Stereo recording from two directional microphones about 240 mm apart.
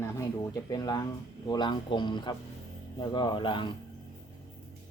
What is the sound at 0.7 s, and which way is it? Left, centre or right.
Speech, centre.